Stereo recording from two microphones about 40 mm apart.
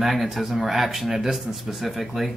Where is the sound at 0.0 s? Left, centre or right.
Centre.